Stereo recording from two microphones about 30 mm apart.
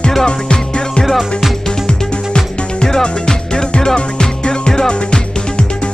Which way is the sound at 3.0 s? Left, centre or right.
Left.